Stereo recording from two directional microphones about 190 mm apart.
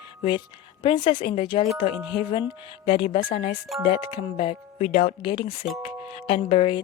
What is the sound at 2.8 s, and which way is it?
Speech, 30° left (ahead or behind).